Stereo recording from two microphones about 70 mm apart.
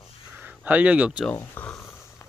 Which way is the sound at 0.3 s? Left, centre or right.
Right.